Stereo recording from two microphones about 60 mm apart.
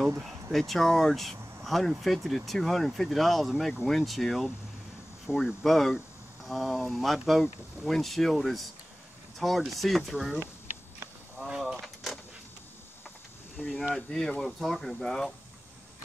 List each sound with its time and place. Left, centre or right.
0.2 s speech: centre
11.3 s mechanisms: centre
11.8 s vehicle: centre
13.6 s speech: left
13.9 s speech: centre